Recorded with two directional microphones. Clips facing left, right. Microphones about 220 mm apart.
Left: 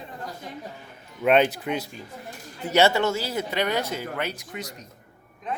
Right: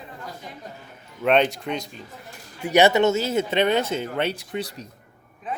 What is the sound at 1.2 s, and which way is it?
Speech, 5° left (ahead or behind).